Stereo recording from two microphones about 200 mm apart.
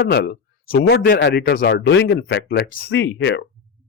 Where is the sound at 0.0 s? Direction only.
55° left (ahead or behind).